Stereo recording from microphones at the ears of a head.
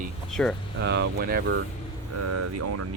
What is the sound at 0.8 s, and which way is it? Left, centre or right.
Speech, right.